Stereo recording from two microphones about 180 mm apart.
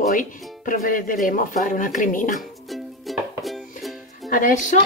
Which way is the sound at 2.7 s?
Centre (ahead or behind).